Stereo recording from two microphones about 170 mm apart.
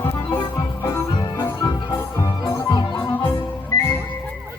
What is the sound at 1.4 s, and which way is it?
Music, 15° left (ahead or behind).